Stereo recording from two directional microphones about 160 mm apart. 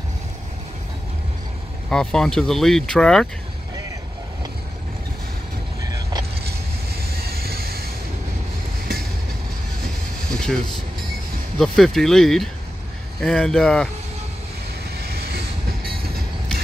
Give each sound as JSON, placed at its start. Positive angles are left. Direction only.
{"t": 1.9, "sound": "speech", "side_deg": 5}
{"t": 7.0, "sound": "vehicle", "side_deg": -70}
{"t": 10.3, "sound": "speech", "side_deg": 5}
{"t": 15.0, "sound": "vehicle", "side_deg": -75}